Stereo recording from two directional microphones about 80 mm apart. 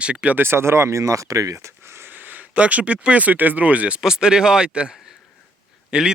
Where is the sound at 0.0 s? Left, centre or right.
Centre.